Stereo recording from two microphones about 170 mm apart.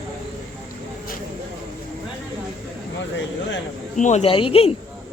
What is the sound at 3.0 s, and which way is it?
Speech, 90° left.